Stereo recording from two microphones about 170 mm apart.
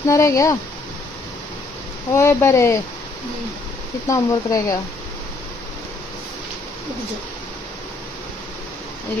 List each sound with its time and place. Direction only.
0.1 s speech: 20° left (ahead or behind)
2.1 s speech: 15° left (ahead or behind)
4.1 s speech: 20° left (ahead or behind)